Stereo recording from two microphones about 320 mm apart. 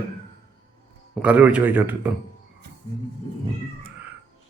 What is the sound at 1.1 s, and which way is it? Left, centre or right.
Speech, centre.